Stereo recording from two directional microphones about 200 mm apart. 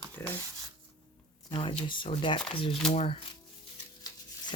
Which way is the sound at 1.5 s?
25° left (ahead or behind).